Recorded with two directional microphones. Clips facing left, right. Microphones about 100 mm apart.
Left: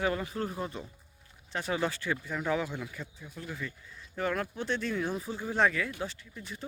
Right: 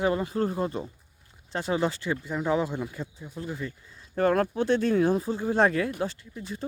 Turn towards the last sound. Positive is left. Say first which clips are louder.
# right 6 dB
turn(degrees=-30)  # may be behind; listen again after turning